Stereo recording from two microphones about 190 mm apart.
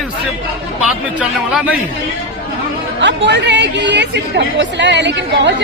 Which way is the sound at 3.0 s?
70° right (ahead or behind).